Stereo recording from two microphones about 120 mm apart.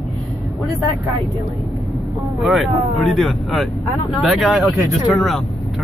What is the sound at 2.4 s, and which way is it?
Speech, centre (ahead or behind).